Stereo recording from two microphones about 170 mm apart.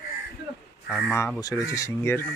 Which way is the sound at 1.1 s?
15° left (ahead or behind).